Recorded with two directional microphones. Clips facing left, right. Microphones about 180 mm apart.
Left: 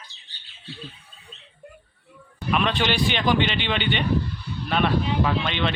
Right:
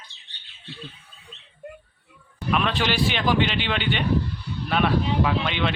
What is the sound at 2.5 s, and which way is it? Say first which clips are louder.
A man's voice: left 1 dB; centre (ahead or behind).